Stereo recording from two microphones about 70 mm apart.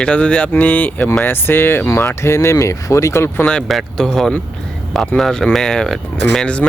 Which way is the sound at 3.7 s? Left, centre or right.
Centre.